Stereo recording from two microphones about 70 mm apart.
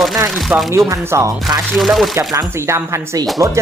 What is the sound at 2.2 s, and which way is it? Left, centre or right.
Speech, right.